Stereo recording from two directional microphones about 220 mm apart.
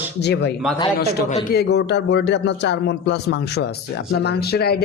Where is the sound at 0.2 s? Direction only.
50° left (ahead or behind).